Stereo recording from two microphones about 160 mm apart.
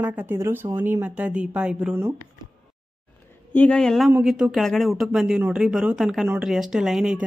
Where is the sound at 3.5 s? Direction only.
10° left (ahead or behind).